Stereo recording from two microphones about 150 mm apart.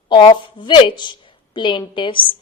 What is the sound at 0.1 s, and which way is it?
A woman's voice, 30° left (ahead or behind).